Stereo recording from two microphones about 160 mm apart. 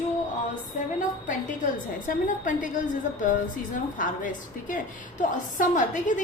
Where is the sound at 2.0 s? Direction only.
55° left (ahead or behind).